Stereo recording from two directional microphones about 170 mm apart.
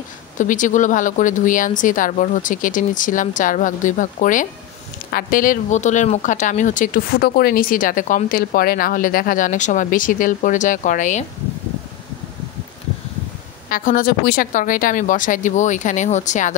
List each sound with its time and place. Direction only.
0.4 s speech: 50° left (ahead or behind)
13.7 s speech: 55° left (ahead or behind)